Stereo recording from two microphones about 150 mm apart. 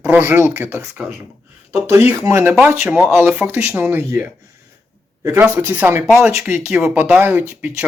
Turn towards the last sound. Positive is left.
turn(degrees=-10)  # may be behind; listen again after turning